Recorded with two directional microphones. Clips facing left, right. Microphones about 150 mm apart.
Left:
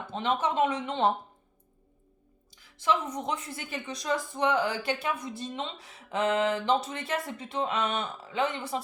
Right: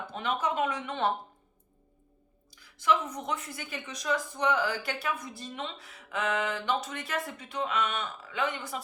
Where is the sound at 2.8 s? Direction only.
25° left (ahead or behind).